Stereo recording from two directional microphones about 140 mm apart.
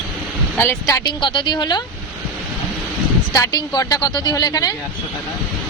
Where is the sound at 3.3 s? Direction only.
25° left (ahead or behind).